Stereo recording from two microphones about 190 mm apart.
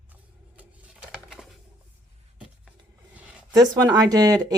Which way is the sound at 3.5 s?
20° right (ahead or behind).